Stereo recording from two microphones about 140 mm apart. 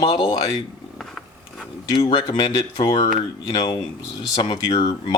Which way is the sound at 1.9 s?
35° left (ahead or behind).